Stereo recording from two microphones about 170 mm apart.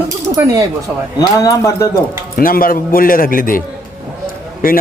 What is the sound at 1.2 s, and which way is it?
Speech, 20° left (ahead or behind).